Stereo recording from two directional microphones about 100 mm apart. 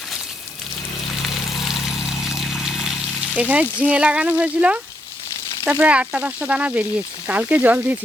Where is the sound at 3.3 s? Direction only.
15° right (ahead or behind).